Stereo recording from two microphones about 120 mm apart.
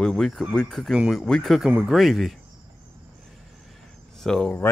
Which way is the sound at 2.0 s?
Centre (ahead or behind).